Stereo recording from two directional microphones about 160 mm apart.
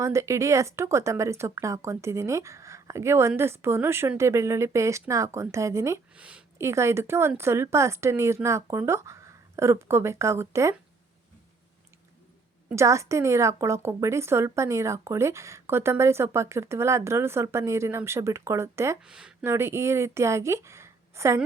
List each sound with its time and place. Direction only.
0.0 s speech: 20° right (ahead or behind)
6.1 s a sound: 5° right (ahead or behind)
6.7 s speech: 15° right (ahead or behind)
12.7 s speech: 20° right (ahead or behind)
19.0 s speech: 5° right (ahead or behind)
19.5 s speech: 15° right (ahead or behind)